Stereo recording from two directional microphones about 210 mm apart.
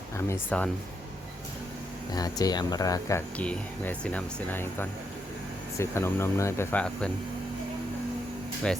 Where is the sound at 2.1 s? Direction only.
20° left (ahead or behind).